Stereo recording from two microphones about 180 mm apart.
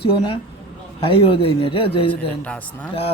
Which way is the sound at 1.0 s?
30° left (ahead or behind).